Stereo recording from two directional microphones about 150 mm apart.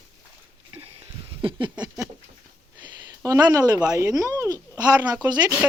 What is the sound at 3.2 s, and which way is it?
Speech, 25° right (ahead or behind).